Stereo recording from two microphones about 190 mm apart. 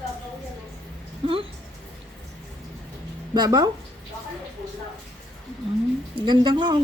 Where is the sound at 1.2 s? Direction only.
30° right (ahead or behind).